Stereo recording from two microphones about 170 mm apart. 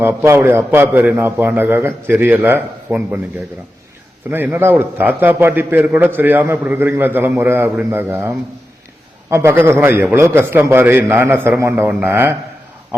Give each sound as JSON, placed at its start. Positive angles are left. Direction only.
{"t": 0.0, "sound": "a man's voice", "side_deg": -10}
{"t": 4.3, "sound": "a man's voice", "side_deg": -10}